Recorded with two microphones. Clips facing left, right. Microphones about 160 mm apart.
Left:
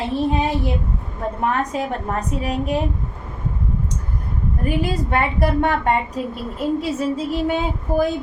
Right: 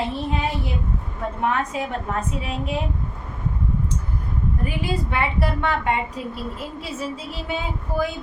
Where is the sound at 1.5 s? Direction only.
40° left (ahead or behind).